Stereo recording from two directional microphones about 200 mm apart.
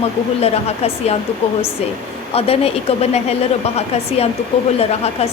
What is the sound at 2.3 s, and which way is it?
A woman's voice, 30° left (ahead or behind).